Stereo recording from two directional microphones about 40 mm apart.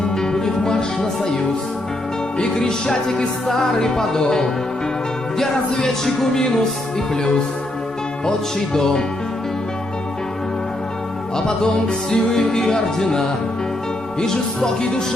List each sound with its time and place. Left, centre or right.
0.2 s music: centre
2.4 s music: centre
8.7 s music: centre
11.3 s music: centre